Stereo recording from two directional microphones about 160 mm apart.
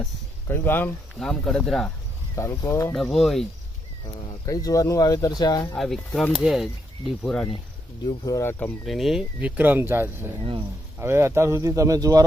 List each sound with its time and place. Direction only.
0.0 s speech: 10° left (ahead or behind)
2.3 s speech: 15° left (ahead or behind)
2.9 s speech: centre (ahead or behind)
4.4 s speech: 20° left (ahead or behind)
5.7 s speech: centre (ahead or behind)
8.0 s speech: 20° left (ahead or behind); by 12.2 s 20° right (ahead or behind)